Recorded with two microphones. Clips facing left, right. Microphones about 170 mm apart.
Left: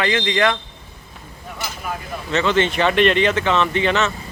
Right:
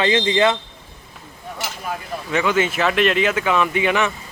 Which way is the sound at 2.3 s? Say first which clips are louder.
Left 1 dB; 10° right (ahead or behind).